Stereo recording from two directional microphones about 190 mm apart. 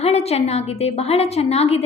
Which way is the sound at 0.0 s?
35° left (ahead or behind).